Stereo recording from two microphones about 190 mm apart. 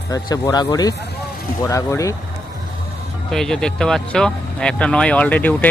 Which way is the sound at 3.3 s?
5° left (ahead or behind).